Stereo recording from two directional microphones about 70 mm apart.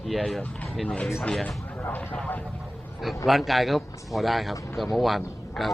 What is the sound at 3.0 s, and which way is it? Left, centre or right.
A man's voice, centre.